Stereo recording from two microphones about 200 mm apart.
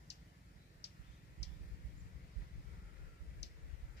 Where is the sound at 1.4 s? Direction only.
60° left (ahead or behind).